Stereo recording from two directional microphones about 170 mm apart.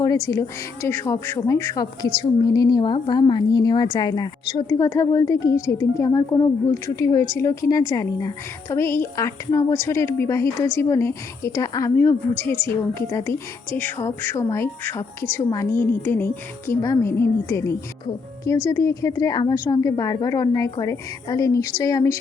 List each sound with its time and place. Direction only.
0.0 s a woman's voice: 20° left (ahead or behind)